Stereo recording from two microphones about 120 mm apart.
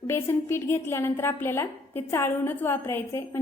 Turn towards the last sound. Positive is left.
turn(degrees=20)  # may be behind; listen again after turning